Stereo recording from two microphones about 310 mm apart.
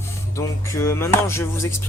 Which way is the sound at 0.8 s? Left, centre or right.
Centre.